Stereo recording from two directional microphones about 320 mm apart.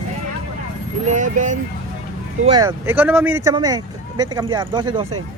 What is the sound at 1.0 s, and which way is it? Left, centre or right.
Speech, right.